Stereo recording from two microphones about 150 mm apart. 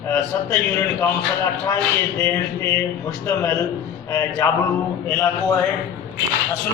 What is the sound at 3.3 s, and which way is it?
A man's voice, 20° left (ahead or behind).